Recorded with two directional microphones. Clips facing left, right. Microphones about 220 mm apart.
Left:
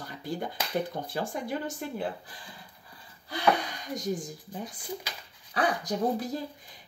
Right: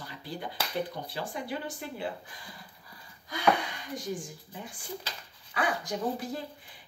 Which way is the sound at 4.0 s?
40° left (ahead or behind).